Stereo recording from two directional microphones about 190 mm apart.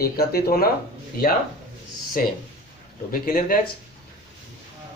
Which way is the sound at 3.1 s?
50° left (ahead or behind).